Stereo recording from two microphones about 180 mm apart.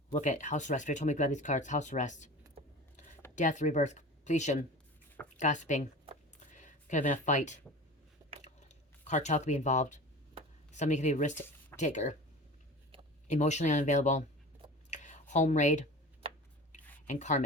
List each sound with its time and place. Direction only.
0.1 s speech: 40° left (ahead or behind)
3.3 s speech: 40° left (ahead or behind)
6.4 s a sound: 40° left (ahead or behind)
8.2 s biting: 15° right (ahead or behind)
8.6 s speech: 40° left (ahead or behind)
13.2 s speech: 40° left (ahead or behind)
14.8 s a sound: 40° left (ahead or behind)
17.1 s speech: 40° left (ahead or behind)